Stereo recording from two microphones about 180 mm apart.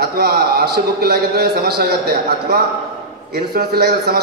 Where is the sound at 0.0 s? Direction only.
60° right (ahead or behind).